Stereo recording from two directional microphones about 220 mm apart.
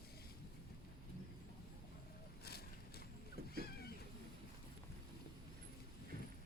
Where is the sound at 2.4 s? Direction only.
45° left (ahead or behind).